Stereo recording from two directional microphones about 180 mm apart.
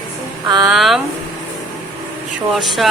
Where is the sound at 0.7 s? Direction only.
Centre (ahead or behind).